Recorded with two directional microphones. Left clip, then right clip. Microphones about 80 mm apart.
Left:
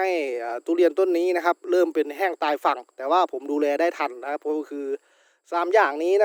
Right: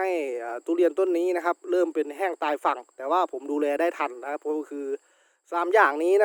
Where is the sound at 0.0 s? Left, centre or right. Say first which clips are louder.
Left 3 dB; centre.